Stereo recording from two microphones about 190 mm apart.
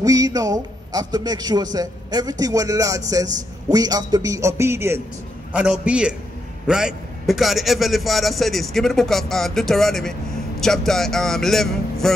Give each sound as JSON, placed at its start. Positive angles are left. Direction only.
{"t": 0.0, "sound": "a man's voice", "side_deg": -20}